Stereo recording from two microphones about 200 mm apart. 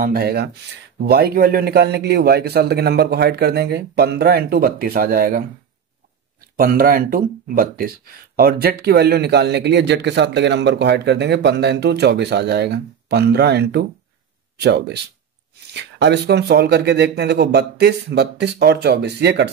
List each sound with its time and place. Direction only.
0.0 s a man's voice: 50° right (ahead or behind)
6.5 s a man's voice: 45° right (ahead or behind)